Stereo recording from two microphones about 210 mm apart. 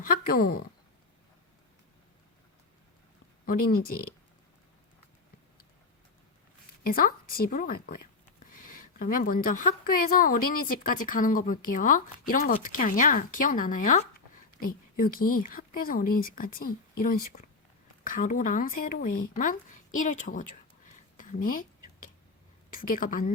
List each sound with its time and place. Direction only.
0.0 s a woman's voice: 45° left (ahead or behind)
3.4 s speech: 45° left (ahead or behind)
6.8 s a woman's voice: 45° left (ahead or behind)
22.7 s a woman's voice: 40° left (ahead or behind)